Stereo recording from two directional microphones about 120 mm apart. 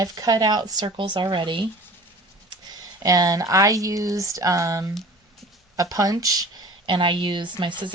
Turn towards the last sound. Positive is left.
turn(degrees=-40)  # may be behind; listen again after turning